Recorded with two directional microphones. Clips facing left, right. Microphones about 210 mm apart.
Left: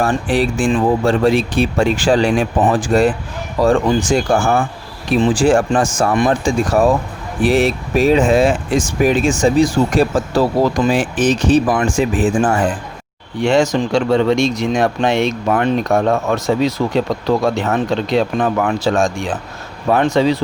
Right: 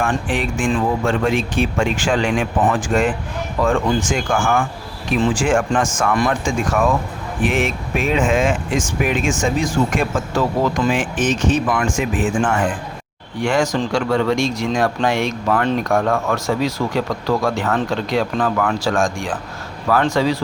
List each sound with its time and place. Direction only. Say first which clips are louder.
0.0 s speech: left 5 dB; 35° left (ahead or behind)